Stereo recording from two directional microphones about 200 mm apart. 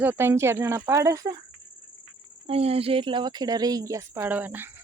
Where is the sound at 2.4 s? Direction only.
30° right (ahead or behind); by 4.7 s 10° right (ahead or behind).